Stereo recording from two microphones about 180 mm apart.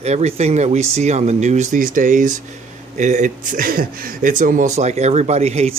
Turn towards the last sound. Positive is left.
turn(degrees=-35)  # may be behind; listen again after turning